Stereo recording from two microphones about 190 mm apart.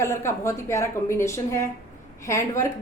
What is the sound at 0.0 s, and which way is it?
A woman's voice, 15° left (ahead or behind).